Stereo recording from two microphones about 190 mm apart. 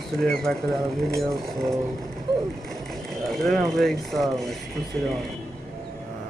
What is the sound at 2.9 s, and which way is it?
Speech, centre (ahead or behind).